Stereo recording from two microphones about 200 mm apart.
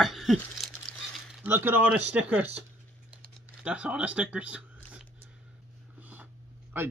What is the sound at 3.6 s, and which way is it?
Speech, 5° right (ahead or behind).